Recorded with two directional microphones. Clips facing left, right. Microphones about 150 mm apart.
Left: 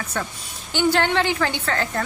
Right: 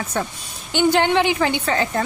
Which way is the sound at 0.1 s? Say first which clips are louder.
Right 3 dB; 20° right (ahead or behind).